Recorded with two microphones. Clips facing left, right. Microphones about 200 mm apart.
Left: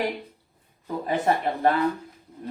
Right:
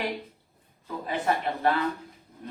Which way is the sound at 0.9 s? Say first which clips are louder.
Left 5 dB; 45° left (ahead or behind).